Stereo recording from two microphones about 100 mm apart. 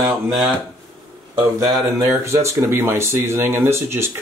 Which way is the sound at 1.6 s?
30° right (ahead or behind).